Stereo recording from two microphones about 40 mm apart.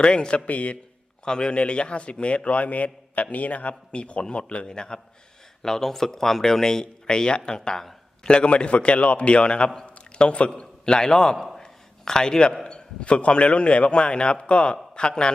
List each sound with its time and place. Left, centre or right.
0.0 s a man's voice: left
0.4 s speech: left
1.2 s a man's voice: left
5.6 s a man's voice: centre
9.8 s a sound: left
10.6 s a man's voice: left
11.3 s a man's voice: centre
11.6 s a sound: centre
12.6 s a man's voice: left